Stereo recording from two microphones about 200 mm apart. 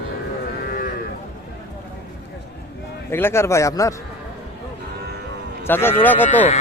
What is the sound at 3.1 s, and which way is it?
Speech, 10° left (ahead or behind).